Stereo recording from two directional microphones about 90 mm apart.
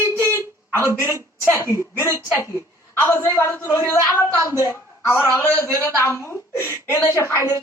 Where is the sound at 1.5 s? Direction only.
30° left (ahead or behind).